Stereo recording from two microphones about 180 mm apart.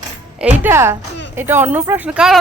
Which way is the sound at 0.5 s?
10° right (ahead or behind).